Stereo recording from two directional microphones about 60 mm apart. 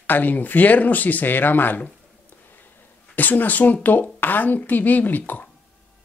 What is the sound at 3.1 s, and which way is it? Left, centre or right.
Speech, left.